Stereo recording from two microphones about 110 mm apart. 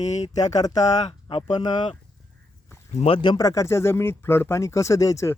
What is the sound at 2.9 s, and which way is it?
Speech, 90° left.